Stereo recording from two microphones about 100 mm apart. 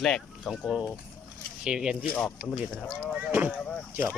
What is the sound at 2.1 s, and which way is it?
Speech, 10° left (ahead or behind).